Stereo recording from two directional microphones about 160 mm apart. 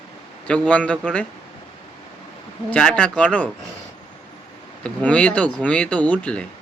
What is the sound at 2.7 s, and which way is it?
Speech, 5° left (ahead or behind).